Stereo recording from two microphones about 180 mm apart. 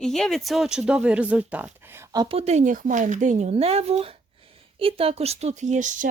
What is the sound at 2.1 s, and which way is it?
Speech, 25° right (ahead or behind).